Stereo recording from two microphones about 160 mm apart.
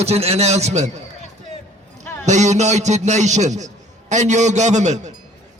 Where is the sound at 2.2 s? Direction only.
45° right (ahead or behind).